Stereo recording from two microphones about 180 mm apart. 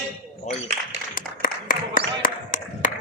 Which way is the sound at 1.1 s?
50° left (ahead or behind).